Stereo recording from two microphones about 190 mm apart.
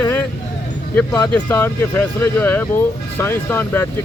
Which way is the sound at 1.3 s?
10° left (ahead or behind).